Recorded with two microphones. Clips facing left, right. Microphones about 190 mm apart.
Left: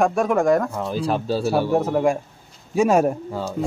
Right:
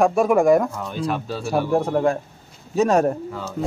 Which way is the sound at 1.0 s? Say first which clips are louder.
Left 2 dB; 30° left (ahead or behind).